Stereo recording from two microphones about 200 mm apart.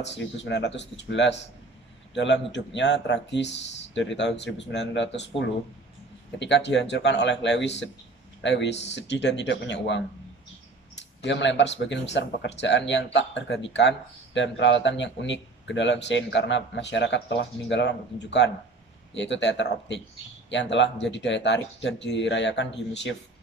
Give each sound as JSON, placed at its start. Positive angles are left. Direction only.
{"t": 0.0, "sound": "speech", "side_deg": 60}
{"t": 6.4, "sound": "speech", "side_deg": 60}
{"t": 11.1, "sound": "speech", "side_deg": 65}